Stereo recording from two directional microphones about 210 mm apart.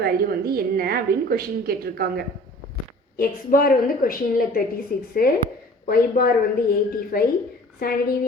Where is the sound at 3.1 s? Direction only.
45° left (ahead or behind).